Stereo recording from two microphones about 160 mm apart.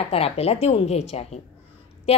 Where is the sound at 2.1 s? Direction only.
40° left (ahead or behind).